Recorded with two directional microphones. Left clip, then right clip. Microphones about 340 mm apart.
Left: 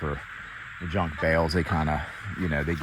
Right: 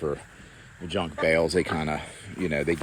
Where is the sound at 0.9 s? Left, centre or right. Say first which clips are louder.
Right 1 dB; centre.